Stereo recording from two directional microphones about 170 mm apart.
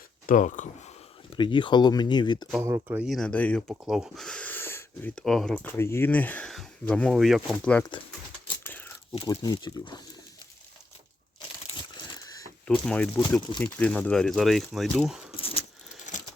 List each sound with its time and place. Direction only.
0.3 s speech: 45° left (ahead or behind)
1.4 s speech: 30° left (ahead or behind)
2.6 s speech: 15° right (ahead or behind)
2.9 s speech: 5° right (ahead or behind)
5.7 s speech: 15° left (ahead or behind)
8.6 s crumpling: 10° left (ahead or behind)
9.2 s speech: 20° left (ahead or behind)
12.0 s a sound: 25° left (ahead or behind)
12.6 s speech: 5° left (ahead or behind)
15.4 s a sound: 35° left (ahead or behind)